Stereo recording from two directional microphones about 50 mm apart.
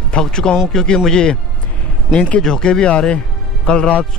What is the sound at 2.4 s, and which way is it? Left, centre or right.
Speech, centre.